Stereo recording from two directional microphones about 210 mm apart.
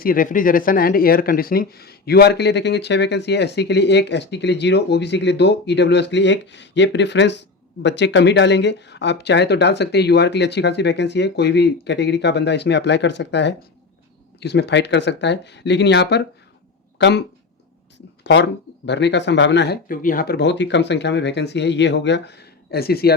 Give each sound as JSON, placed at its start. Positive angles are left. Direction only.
{"t": 0.0, "sound": "speech", "side_deg": 40}